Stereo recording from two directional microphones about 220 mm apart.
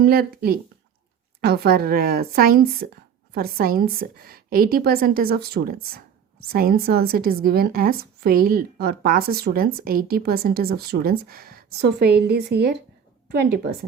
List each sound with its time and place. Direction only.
0.0 s a woman's voice: 45° right (ahead or behind)